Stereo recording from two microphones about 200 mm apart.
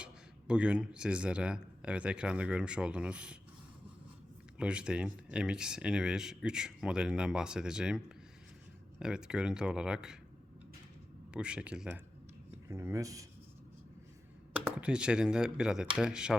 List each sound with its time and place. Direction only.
0.0 s speech: 5° right (ahead or behind)
4.5 s speech: 5° right (ahead or behind)
11.3 s speech: 5° right (ahead or behind)
14.5 s speech: 5° right (ahead or behind)